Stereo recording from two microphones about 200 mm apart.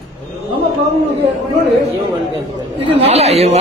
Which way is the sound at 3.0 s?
30° right (ahead or behind).